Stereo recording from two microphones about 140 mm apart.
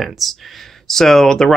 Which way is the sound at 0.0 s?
Centre (ahead or behind).